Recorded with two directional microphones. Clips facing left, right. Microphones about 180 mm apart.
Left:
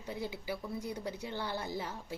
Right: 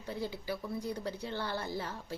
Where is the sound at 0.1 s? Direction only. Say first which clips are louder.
Right 1 dB; 15° left (ahead or behind).